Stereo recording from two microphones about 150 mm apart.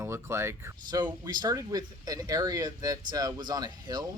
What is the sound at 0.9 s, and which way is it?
Speech, 30° right (ahead or behind).